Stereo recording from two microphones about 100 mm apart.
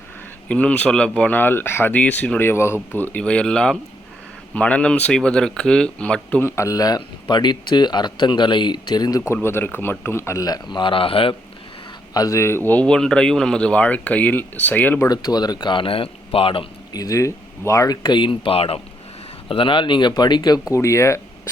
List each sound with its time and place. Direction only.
0.4 s speech: 15° left (ahead or behind)
6.4 s speech: 30° left (ahead or behind)
9.3 s a man's voice: 25° left (ahead or behind); by 11.3 s 65° left (ahead or behind)
12.1 s speech: 35° left (ahead or behind); by 15.0 s 15° left (ahead or behind)
15.0 s speech: 40° left (ahead or behind); by 16.6 s 65° left (ahead or behind)
16.9 s speech: 35° left (ahead or behind); by 18.8 s 75° left (ahead or behind)
19.5 s speech: 60° left (ahead or behind); by 20.7 s 45° left (ahead or behind)
20.7 s speech: 30° left (ahead or behind)